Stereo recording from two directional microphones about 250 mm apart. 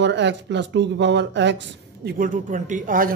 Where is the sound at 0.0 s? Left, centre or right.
Right.